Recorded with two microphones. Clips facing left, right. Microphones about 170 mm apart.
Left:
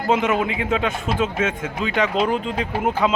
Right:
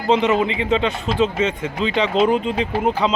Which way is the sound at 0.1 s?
5° left (ahead or behind).